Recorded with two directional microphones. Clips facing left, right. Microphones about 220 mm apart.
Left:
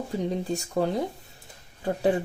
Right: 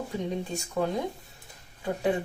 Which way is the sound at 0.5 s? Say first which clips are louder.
Left 3 dB; 35° left (ahead or behind).